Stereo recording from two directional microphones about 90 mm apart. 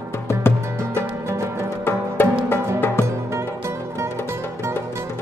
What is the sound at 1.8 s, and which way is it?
Music, 25° left (ahead or behind).